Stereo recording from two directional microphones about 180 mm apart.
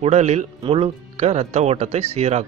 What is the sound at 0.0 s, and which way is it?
Speech, 40° right (ahead or behind).